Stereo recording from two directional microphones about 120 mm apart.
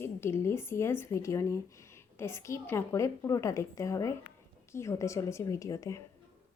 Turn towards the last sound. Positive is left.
turn(degrees=25)  # may be behind; listen again after turning